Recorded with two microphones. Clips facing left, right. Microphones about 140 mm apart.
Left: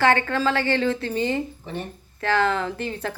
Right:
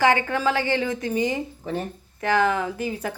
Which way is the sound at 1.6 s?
40° right (ahead or behind).